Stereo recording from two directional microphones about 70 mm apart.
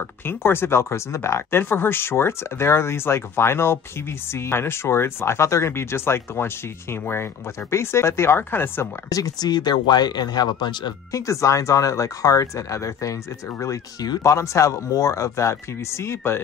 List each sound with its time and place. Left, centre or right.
0.3 s speech: left
9.1 s speech: left
11.1 s speech: left
14.2 s speech: left